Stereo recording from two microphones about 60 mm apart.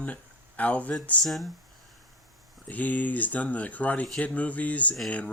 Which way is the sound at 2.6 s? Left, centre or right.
Left.